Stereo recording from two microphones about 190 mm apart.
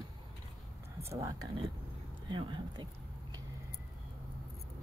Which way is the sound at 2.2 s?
25° right (ahead or behind).